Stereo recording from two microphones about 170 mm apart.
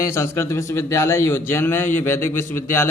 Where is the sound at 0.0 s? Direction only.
15° left (ahead or behind).